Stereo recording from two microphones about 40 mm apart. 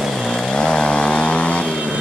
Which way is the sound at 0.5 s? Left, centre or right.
Left.